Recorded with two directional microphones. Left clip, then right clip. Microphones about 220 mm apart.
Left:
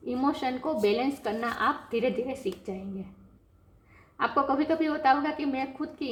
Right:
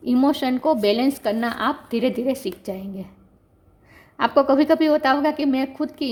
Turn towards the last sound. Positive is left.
turn(degrees=-50)  # may be behind; listen again after turning